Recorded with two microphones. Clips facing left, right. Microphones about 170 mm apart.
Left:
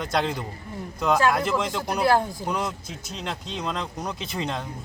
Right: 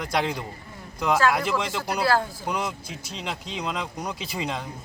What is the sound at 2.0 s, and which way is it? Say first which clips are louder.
Speech: left 3 dB; 20° left (ahead or behind).